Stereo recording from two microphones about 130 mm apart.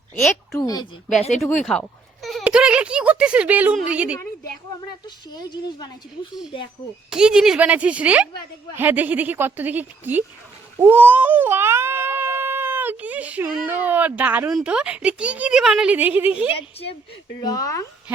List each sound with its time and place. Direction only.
0.2 s a woman's voice: centre (ahead or behind)
0.6 s speech: 30° left (ahead or behind)
1.6 s a sound: 5° left (ahead or behind)
2.4 s a woman's voice: 5° right (ahead or behind)
5.0 s speech: 35° left (ahead or behind)
7.1 s a woman's voice: 5° right (ahead or behind)
10.8 s baby cry: 15° right (ahead or behind)
14.5 s a woman's voice: 5° right (ahead or behind)
17.4 s speech: 30° left (ahead or behind)